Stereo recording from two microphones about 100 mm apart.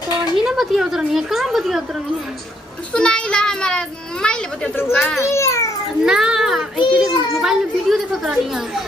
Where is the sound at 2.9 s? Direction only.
10° left (ahead or behind).